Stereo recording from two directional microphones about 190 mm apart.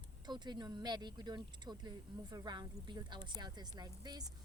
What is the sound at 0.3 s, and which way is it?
Speech, 20° right (ahead or behind).